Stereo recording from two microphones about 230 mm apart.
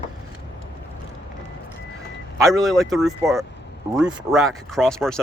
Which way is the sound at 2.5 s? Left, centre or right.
Centre.